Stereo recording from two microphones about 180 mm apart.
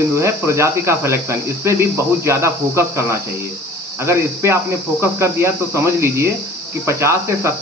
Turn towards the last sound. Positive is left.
turn(degrees=-15)  # may be behind; listen again after turning